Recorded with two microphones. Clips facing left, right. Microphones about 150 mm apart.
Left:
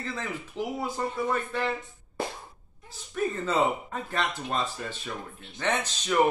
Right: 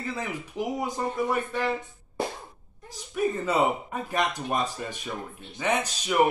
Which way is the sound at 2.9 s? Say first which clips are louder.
Right 3 dB; 10° right (ahead or behind).